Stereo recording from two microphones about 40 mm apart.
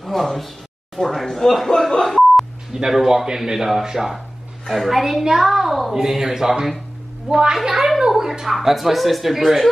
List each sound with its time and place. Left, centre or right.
0.0 s speech: centre
1.9 s beep: centre
2.7 s a man's voice: centre
5.2 s a man's voice: centre
5.5 s a man's voice: centre